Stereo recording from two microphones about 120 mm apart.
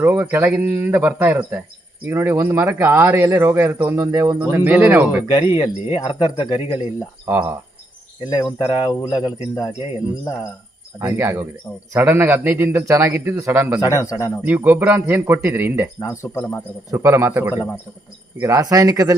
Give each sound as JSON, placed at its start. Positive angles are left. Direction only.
{"t": 0.0, "sound": "speech", "side_deg": -15}
{"t": 5.3, "sound": "speech", "side_deg": 40}
{"t": 7.3, "sound": "speech", "side_deg": -15}
{"t": 8.3, "sound": "speech", "side_deg": 30}
{"t": 11.0, "sound": "speech", "side_deg": -20}
{"t": 13.8, "sound": "speech", "side_deg": 25}
{"t": 14.4, "sound": "speech", "side_deg": -15}
{"t": 16.0, "sound": "speech", "side_deg": 25}
{"t": 16.9, "sound": "speech", "side_deg": -25}